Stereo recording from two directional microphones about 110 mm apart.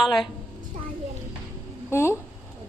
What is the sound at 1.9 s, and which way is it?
Speech, 25° left (ahead or behind).